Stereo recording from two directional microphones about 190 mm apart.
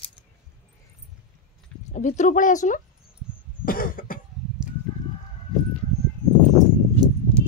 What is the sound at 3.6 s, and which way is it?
Cough, 50° left (ahead or behind).